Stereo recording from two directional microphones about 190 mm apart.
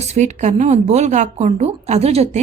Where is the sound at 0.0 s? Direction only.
35° right (ahead or behind).